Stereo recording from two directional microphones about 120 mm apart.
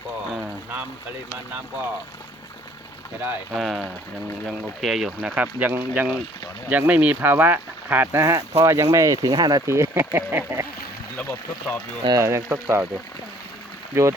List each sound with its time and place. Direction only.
0.4 s a sound: 15° right (ahead or behind)
3.5 s speech: centre (ahead or behind)
5.3 s speech: 15° right (ahead or behind)
11.2 s speech: 20° left (ahead or behind)
12.0 s speech: 25° right (ahead or behind)
13.9 s speech: 25° right (ahead or behind)